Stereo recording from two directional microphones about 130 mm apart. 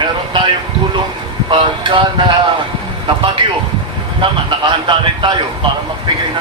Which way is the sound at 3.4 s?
40° right (ahead or behind).